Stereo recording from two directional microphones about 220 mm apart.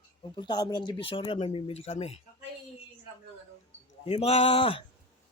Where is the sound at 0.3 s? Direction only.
20° left (ahead or behind).